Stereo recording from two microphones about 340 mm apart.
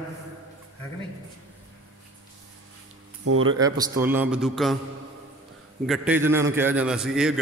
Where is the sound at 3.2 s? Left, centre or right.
Right.